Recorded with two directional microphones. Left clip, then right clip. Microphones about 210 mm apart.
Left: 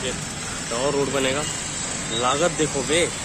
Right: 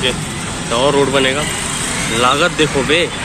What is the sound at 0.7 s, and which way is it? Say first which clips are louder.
Speech: right 10 dB; 5° left (ahead or behind).